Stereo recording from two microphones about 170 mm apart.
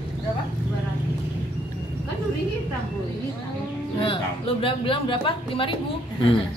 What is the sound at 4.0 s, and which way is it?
Speech, 30° left (ahead or behind).